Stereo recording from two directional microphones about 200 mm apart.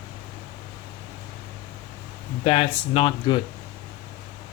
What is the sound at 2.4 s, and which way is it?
Speech, 30° left (ahead or behind).